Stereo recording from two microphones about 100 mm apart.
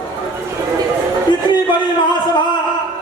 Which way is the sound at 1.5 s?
50° left (ahead or behind).